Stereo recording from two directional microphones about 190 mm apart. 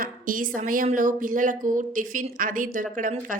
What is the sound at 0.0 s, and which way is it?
A woman's voice, 45° right (ahead or behind).